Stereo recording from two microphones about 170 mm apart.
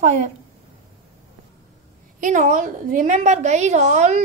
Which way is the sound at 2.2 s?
45° right (ahead or behind).